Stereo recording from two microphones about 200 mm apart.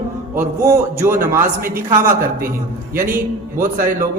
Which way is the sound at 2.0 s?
45° right (ahead or behind).